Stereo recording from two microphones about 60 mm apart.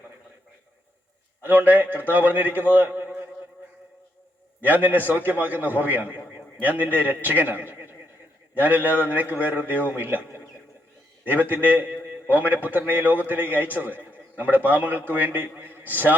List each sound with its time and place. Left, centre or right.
1.5 s a man's voice: right
4.6 s a man's voice: right